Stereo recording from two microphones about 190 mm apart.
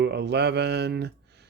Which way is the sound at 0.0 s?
65° right (ahead or behind).